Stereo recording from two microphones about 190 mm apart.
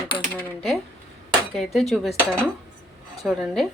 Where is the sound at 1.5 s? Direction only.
Centre (ahead or behind).